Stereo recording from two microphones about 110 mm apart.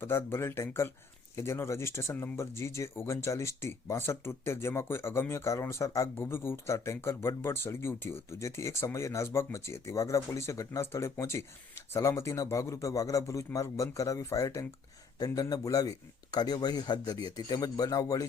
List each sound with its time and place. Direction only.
0.0 s a man's voice: 20° left (ahead or behind)